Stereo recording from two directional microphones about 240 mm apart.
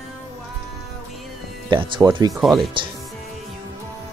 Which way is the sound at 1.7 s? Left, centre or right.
Centre.